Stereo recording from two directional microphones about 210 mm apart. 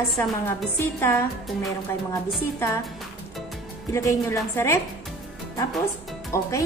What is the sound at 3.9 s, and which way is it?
Speech, 15° left (ahead or behind).